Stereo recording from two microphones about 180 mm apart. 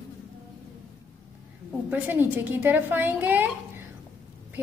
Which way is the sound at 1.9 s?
10° right (ahead or behind).